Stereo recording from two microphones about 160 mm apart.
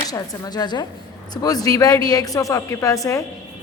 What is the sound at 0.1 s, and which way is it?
A woman's voice, 25° left (ahead or behind).